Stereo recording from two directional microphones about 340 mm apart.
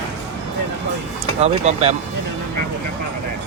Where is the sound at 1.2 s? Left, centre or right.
Centre.